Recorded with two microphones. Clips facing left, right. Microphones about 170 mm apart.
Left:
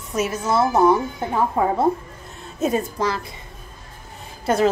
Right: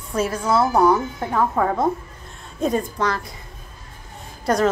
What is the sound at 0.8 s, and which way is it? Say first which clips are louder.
Speech: left 1 dB; 25° left (ahead or behind).